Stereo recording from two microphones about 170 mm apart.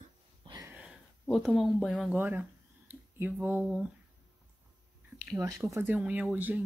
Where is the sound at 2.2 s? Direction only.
10° right (ahead or behind).